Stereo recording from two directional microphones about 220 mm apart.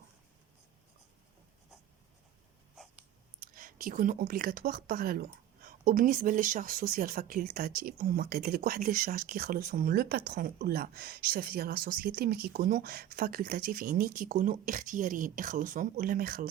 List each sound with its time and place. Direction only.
3.4 s speech: 40° right (ahead or behind)